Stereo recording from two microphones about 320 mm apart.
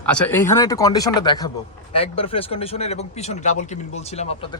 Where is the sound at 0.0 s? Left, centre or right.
Centre.